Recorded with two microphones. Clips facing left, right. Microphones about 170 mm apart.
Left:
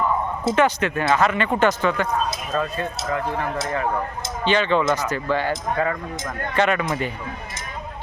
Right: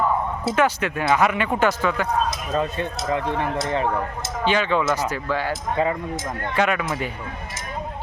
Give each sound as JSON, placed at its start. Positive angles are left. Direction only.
{"t": 0.4, "sound": "speech", "side_deg": -5}
{"t": 2.5, "sound": "speech", "side_deg": -25}
{"t": 4.4, "sound": "speech", "side_deg": -5}
{"t": 5.7, "sound": "speech", "side_deg": -20}
{"t": 6.6, "sound": "speech", "side_deg": -5}